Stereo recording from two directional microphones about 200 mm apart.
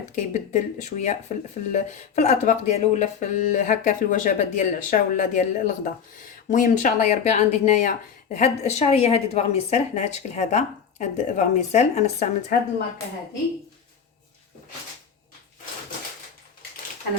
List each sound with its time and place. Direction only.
0.2 s speech: 40° left (ahead or behind)